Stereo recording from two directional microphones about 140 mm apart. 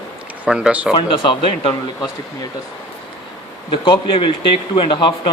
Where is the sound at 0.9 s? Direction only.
40° left (ahead or behind).